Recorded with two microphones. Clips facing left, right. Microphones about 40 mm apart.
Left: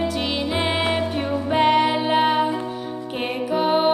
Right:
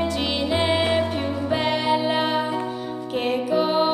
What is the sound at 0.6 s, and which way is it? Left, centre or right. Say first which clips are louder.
Music: right 1 dB; centre.